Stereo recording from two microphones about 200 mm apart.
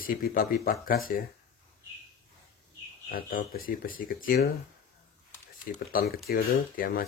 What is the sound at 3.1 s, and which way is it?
Speech, 45° left (ahead or behind).